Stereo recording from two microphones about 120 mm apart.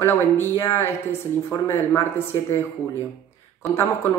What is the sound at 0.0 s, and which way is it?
Speech, 20° left (ahead or behind).